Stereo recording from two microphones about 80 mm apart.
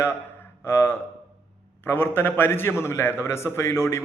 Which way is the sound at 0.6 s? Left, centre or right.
Left.